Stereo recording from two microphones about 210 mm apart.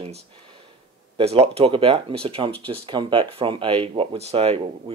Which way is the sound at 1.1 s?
30° right (ahead or behind).